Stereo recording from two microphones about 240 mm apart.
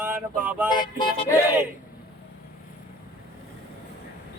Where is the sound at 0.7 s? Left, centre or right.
Centre.